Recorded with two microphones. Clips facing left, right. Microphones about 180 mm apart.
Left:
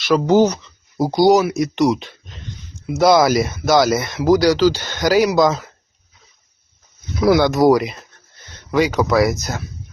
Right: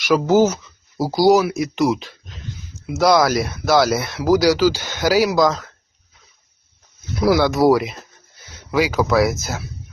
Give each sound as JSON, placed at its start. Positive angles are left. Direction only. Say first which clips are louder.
{"t": 0.3, "sound": "speech", "louder": "left 2 dB", "side_deg": -5}
{"t": 7.2, "sound": "speech", "louder": "left 2 dB", "side_deg": 0}